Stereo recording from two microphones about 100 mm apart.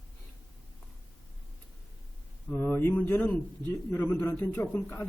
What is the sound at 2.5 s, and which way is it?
A man's voice, 15° left (ahead or behind).